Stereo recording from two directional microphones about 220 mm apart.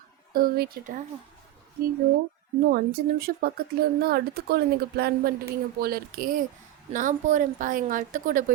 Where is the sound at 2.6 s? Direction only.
45° right (ahead or behind).